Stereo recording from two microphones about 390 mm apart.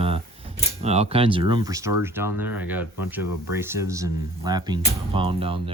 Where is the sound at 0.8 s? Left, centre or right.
Centre.